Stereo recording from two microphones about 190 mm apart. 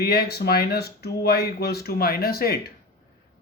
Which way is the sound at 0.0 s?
55° left (ahead or behind).